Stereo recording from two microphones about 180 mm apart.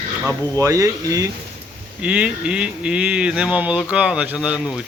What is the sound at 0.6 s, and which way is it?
Speech, 15° right (ahead or behind).